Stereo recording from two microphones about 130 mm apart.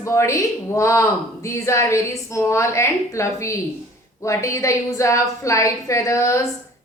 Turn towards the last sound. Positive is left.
turn(degrees=25)  # may be behind; listen again after turning